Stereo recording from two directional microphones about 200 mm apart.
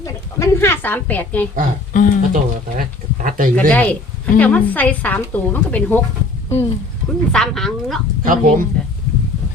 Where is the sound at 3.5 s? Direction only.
5° left (ahead or behind).